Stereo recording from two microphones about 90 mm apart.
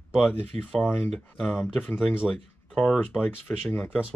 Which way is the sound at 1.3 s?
5° left (ahead or behind).